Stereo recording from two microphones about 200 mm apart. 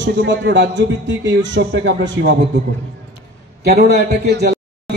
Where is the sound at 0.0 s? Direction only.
60° right (ahead or behind).